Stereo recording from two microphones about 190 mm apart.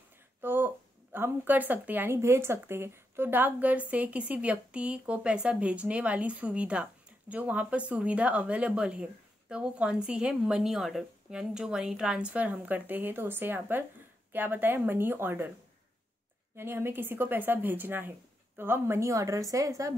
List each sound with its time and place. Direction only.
0.4 s a sound: 10° right (ahead or behind)
1.1 s speech: 10° right (ahead or behind)
16.5 s speech: 10° right (ahead or behind)